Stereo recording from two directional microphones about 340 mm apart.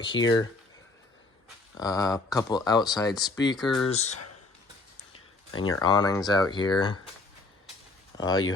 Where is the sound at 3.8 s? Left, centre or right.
Centre.